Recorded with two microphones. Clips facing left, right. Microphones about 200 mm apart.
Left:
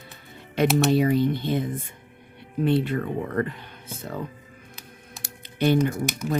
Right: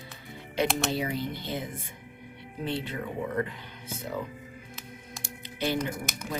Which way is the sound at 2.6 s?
60° left (ahead or behind).